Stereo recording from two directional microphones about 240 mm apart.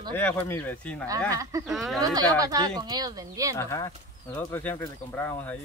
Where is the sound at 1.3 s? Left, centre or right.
Centre.